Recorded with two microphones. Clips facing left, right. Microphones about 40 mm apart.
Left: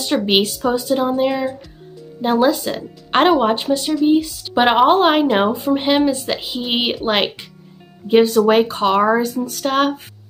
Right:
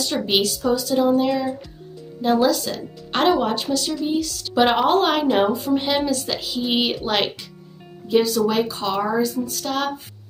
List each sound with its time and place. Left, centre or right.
0.0 s speech: left